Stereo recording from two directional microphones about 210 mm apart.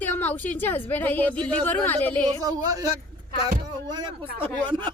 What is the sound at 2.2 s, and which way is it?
Speech, 15° right (ahead or behind).